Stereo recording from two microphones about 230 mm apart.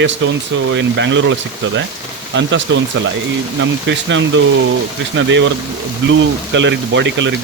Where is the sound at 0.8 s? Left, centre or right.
Right.